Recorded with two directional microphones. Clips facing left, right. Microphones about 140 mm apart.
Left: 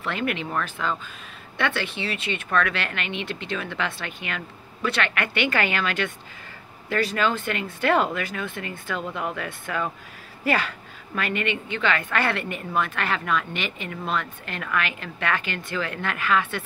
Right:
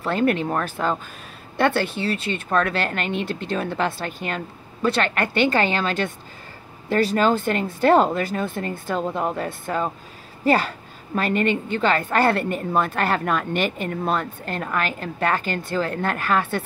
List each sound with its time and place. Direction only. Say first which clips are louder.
0.0 s a woman's voice: right 7 dB; 40° right (ahead or behind)